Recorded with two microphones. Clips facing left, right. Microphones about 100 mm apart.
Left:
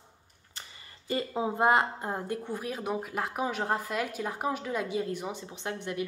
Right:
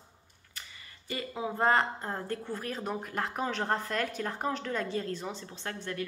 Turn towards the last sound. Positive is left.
turn(degrees=15)  # may be behind; listen again after turning